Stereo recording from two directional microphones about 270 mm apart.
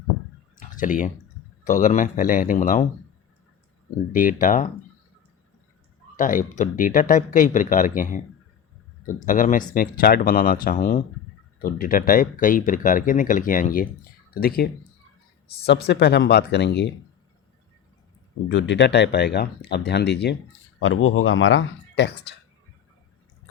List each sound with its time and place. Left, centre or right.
0.5 s a sound: left
1.6 s speech: left
4.1 s speech: left
6.1 s speech: left
18.4 s speech: left
20.7 s speech: left